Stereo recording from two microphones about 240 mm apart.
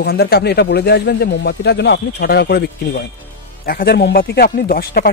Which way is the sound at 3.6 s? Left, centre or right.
Left.